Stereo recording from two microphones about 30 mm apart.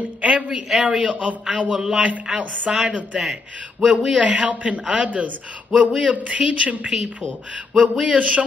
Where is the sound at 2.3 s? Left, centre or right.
Right.